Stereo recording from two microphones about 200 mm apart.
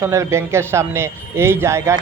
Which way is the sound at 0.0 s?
15° right (ahead or behind).